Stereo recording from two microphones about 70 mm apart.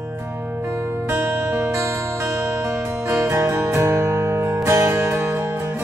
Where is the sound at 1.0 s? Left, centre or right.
Right.